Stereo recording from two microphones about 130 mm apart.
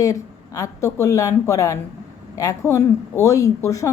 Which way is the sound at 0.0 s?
25° left (ahead or behind).